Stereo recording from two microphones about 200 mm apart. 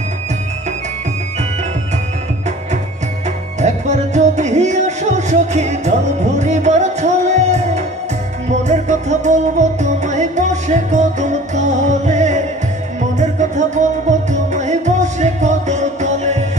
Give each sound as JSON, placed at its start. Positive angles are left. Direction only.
{"t": 3.5, "sound": "music", "side_deg": -35}